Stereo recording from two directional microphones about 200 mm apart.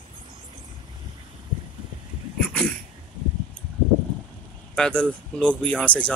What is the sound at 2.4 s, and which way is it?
Dog, 5° left (ahead or behind).